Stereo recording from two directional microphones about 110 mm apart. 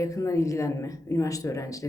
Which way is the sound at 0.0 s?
30° left (ahead or behind).